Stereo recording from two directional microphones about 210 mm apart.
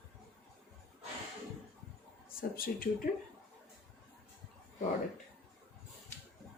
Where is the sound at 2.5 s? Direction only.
45° left (ahead or behind).